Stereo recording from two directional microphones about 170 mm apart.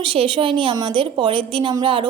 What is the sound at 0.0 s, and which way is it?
A woman's voice, 30° right (ahead or behind).